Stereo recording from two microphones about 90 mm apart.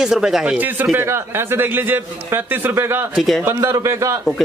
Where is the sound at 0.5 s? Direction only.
20° right (ahead or behind).